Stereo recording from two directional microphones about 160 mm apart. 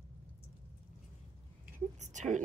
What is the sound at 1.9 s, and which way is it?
Speech, 50° right (ahead or behind).